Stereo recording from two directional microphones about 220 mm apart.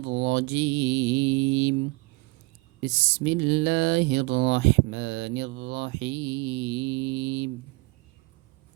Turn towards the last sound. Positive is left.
turn(degrees=-55)  # may be behind; listen again after turning